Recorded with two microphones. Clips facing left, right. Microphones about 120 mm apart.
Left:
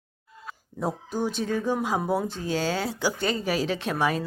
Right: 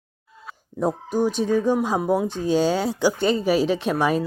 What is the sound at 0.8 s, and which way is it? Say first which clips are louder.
Speech: right 6 dB; 15° right (ahead or behind).